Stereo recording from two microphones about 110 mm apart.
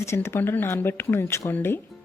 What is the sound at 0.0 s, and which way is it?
Speech, 25° left (ahead or behind).